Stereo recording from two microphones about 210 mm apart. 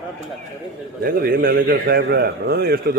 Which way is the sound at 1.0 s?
45° right (ahead or behind).